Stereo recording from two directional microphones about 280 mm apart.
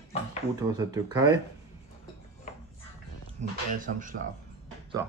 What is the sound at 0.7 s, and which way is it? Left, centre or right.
Speech, centre.